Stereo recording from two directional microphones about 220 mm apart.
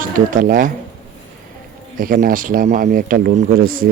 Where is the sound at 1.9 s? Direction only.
40° right (ahead or behind).